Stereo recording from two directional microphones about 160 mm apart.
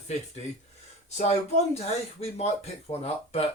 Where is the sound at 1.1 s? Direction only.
40° left (ahead or behind).